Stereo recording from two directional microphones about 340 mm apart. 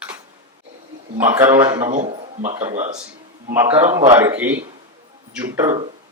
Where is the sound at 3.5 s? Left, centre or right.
Centre.